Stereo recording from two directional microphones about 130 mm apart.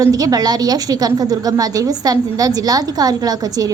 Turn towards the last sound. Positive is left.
turn(degrees=-30)  # may be behind; listen again after turning